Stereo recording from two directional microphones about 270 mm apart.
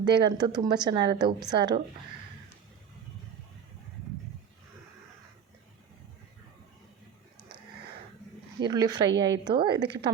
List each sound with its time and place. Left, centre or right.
0.0 s speech: centre
8.6 s speech: centre
9.1 s a woman's voice: right
9.4 s speech: centre
9.7 s a woman's voice: right